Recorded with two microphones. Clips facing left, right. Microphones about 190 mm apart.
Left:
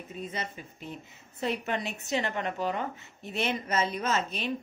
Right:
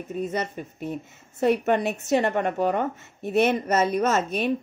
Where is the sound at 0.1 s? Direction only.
50° right (ahead or behind).